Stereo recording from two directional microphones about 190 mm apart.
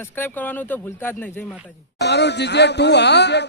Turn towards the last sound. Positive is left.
turn(degrees=65)  # may be behind; listen again after turning